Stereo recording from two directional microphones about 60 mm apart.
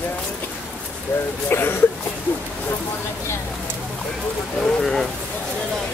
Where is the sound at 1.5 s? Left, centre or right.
Left.